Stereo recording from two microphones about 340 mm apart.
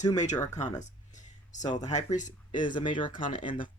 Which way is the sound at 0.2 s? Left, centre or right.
Left.